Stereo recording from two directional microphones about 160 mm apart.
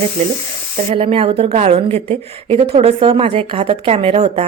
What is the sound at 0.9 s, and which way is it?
Speech, 35° right (ahead or behind).